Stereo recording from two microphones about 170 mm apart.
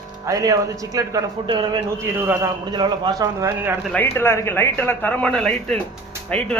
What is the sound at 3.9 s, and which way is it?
Speech, 15° left (ahead or behind).